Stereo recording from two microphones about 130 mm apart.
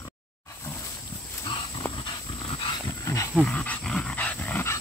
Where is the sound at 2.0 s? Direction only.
40° left (ahead or behind).